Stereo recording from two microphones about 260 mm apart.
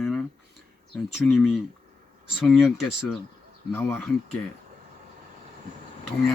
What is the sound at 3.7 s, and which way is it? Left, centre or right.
Speech, centre.